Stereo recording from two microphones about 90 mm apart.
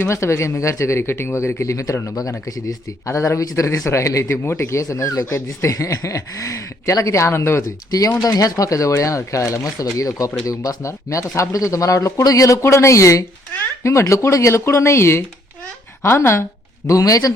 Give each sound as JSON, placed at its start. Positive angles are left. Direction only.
{"t": 0.0, "sound": "speech", "side_deg": 30}
{"t": 7.9, "sound": "a woman's voice", "side_deg": 45}